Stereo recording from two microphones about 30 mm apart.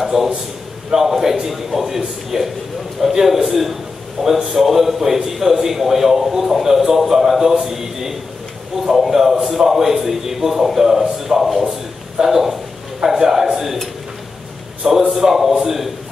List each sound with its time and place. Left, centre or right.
0.0 s a man's voice: centre
14.9 s a man's voice: centre